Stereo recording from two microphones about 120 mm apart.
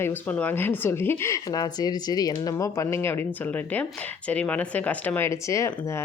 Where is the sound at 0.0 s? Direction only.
15° left (ahead or behind).